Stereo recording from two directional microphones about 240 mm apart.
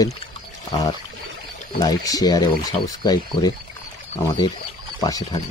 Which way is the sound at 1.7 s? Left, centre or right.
Centre.